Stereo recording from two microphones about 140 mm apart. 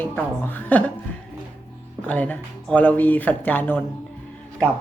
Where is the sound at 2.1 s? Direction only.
10° left (ahead or behind).